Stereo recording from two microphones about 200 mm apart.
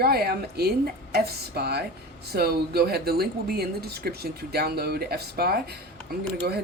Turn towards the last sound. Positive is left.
turn(degrees=-50)  # may be behind; listen again after turning